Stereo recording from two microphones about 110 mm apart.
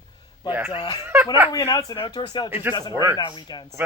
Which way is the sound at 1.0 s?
20° right (ahead or behind).